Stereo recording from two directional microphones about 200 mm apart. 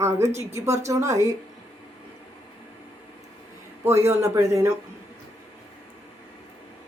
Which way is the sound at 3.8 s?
15° right (ahead or behind).